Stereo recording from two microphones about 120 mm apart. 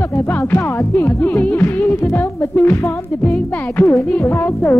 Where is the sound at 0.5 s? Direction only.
20° left (ahead or behind).